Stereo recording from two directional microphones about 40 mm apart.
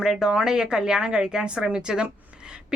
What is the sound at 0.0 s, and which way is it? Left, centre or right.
Speech, centre.